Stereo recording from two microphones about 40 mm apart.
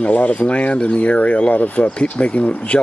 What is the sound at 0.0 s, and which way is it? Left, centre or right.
Speech, left.